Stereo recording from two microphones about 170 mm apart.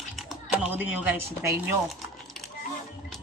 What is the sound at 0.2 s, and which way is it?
Speech, 5° right (ahead or behind).